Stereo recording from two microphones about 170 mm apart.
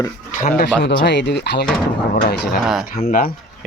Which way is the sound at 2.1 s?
65° left (ahead or behind).